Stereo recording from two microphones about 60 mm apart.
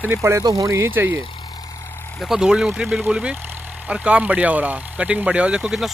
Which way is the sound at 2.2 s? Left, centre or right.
Centre.